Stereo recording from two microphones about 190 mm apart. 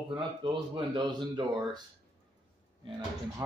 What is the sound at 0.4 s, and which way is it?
Speech, 25° right (ahead or behind).